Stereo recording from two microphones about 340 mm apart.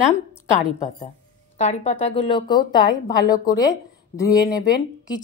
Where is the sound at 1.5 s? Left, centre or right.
Centre.